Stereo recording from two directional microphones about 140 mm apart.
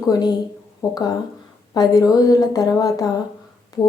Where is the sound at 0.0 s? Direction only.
25° left (ahead or behind).